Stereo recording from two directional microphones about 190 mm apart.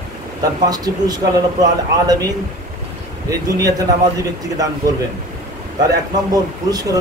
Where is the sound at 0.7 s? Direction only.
20° right (ahead or behind).